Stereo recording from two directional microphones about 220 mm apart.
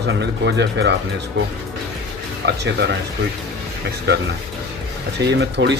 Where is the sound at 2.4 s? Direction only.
50° right (ahead or behind).